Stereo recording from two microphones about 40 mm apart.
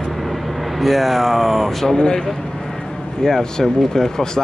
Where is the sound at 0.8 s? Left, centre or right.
Centre.